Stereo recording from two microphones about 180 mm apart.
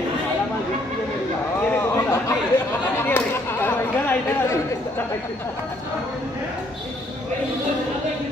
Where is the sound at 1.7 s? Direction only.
15° left (ahead or behind).